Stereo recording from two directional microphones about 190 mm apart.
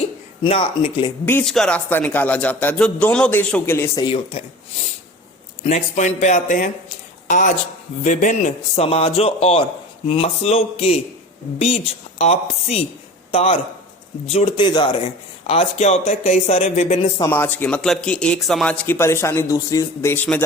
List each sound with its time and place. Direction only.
0.4 s speech: 30° left (ahead or behind)
1.2 s speech: 10° left (ahead or behind)
4.0 s speech: 30° left (ahead or behind)
5.6 s a woman's voice: 35° left (ahead or behind)
12.2 s speech: 35° left (ahead or behind)
17.2 s speech: 10° left (ahead or behind)